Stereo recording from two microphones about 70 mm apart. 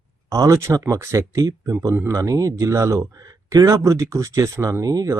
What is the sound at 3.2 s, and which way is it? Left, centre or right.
Speech, right.